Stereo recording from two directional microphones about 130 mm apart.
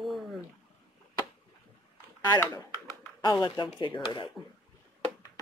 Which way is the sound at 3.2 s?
35° left (ahead or behind).